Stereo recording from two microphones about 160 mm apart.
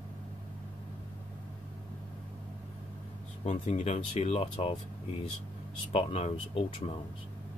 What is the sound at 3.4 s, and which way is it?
Speech, 50° left (ahead or behind).